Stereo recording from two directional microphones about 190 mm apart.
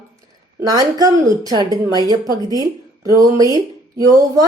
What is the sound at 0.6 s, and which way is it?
Speech, 20° right (ahead or behind).